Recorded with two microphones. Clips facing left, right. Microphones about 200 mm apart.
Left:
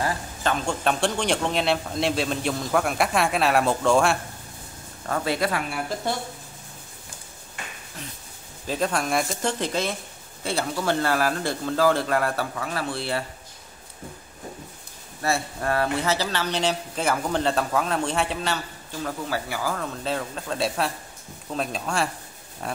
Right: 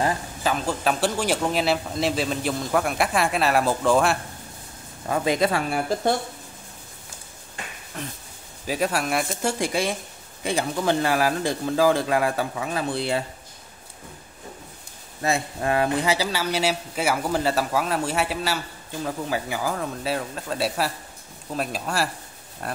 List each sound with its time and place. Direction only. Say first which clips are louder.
0.4 s a man's voice: left 1 dB; 5° right (ahead or behind)
5.0 s speech: right 3 dB; 15° right (ahead or behind)
8.6 s speech: right 1 dB; 10° right (ahead or behind)
15.2 s speech: right 1 dB; 15° right (ahead or behind)
19.0 s a man's voice: right 2 dB; 15° right (ahead or behind)